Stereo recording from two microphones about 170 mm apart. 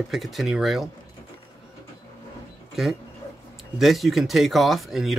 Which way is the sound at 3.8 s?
Centre (ahead or behind).